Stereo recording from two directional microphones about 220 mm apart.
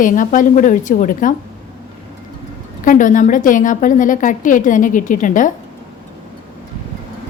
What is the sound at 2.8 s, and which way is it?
A woman's voice, 35° left (ahead or behind).